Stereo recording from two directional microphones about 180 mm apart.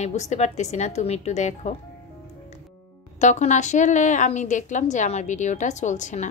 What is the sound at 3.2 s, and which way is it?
A woman's voice, 40° left (ahead or behind).